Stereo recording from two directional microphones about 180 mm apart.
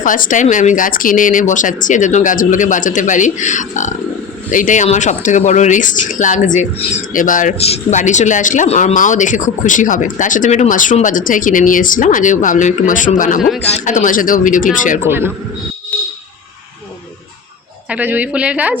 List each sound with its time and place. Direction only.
0.0 s speech: 45° left (ahead or behind)
15.0 s a woman's voice: 15° right (ahead or behind)
17.8 s a woman's voice: 10° right (ahead or behind)